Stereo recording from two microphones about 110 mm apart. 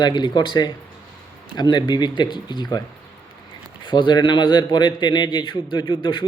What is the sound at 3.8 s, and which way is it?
Speech, 45° left (ahead or behind).